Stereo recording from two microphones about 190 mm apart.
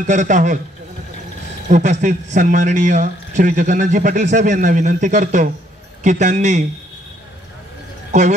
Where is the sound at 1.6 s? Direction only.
40° right (ahead or behind).